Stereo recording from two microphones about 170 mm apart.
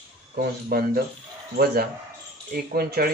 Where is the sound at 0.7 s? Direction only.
60° right (ahead or behind).